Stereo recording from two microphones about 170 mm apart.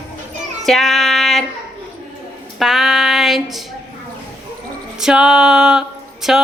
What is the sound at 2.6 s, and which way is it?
Female singing, centre (ahead or behind).